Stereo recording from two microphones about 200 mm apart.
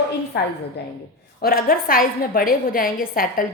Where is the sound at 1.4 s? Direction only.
45° left (ahead or behind).